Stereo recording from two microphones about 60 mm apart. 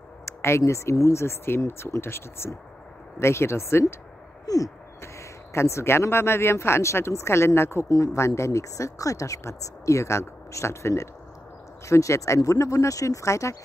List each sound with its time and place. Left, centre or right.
0.2 s speech: left
1.2 s speech: left
4.5 s a sound: left
5.0 s speech: left
7.9 s speech: left